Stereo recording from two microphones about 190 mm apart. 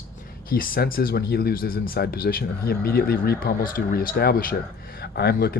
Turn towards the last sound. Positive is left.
turn(degrees=55)  # may be behind; listen again after turning